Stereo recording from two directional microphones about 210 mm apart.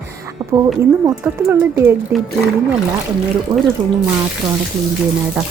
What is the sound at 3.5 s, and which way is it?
Speech, 20° right (ahead or behind).